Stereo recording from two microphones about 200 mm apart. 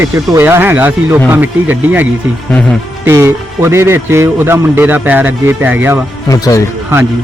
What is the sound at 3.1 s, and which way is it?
A man's voice, 15° right (ahead or behind).